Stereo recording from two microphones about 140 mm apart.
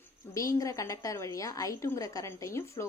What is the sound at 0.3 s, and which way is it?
A woman's voice, 25° left (ahead or behind).